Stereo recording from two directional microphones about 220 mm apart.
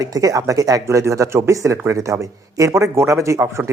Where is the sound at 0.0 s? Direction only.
15° right (ahead or behind).